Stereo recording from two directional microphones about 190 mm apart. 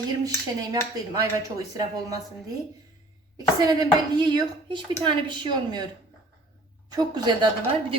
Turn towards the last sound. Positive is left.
turn(degrees=-25)  # may be behind; listen again after turning